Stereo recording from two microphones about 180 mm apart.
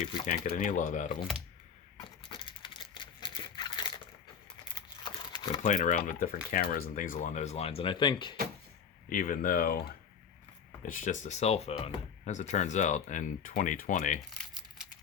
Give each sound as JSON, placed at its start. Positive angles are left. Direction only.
{"t": 0.3, "sound": "speech", "side_deg": 45}
{"t": 2.0, "sound": "a sound", "side_deg": 25}
{"t": 5.6, "sound": "speech", "side_deg": 45}
{"t": 6.5, "sound": "speech", "side_deg": 55}
{"t": 9.0, "sound": "speech", "side_deg": 50}
{"t": 10.8, "sound": "speech", "side_deg": 45}
{"t": 14.3, "sound": "crumpling", "side_deg": 0}